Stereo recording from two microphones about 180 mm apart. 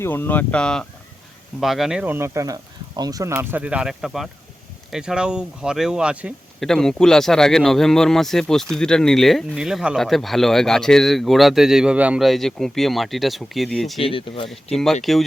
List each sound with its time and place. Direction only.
0.0 s speech: 10° left (ahead or behind)
14.0 s speech: 30° left (ahead or behind)
14.5 s speech: centre (ahead or behind)